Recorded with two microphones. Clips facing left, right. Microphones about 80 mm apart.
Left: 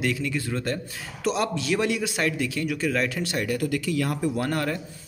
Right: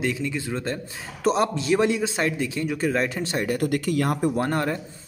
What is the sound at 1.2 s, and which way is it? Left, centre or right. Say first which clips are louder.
A man's voice: right 4 dB; right.